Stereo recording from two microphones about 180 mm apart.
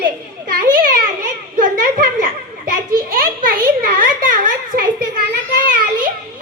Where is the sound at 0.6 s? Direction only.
50° right (ahead or behind).